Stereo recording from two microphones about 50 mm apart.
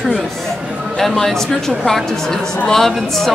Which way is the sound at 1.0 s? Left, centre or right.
Centre.